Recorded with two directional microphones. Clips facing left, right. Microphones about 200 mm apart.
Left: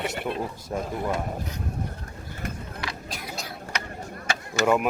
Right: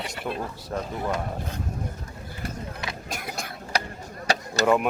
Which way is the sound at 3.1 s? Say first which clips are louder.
Right 2 dB; 50° right (ahead or behind).